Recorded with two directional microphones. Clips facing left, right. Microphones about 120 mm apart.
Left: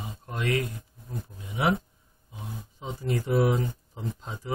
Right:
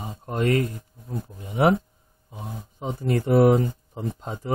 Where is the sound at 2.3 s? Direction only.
50° right (ahead or behind).